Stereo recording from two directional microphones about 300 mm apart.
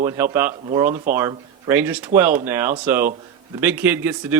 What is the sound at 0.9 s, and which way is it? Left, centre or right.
Speech, right.